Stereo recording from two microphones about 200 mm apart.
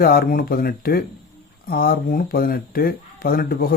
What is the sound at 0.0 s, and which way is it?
Speech, 45° left (ahead or behind).